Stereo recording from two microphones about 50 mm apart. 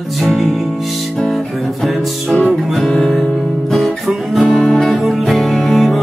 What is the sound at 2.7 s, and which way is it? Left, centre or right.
Music, centre.